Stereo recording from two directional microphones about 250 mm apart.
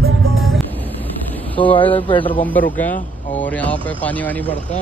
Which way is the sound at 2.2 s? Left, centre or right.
Centre.